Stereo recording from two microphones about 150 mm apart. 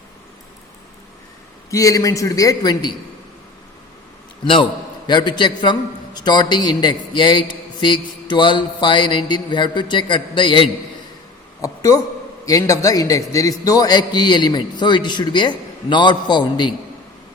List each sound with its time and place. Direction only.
1.7 s a man's voice: 20° left (ahead or behind)
5.0 s a man's voice: 30° left (ahead or behind)
11.6 s a woman's voice: 20° left (ahead or behind)